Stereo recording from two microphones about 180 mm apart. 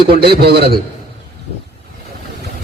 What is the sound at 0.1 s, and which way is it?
Speech, 60° right (ahead or behind).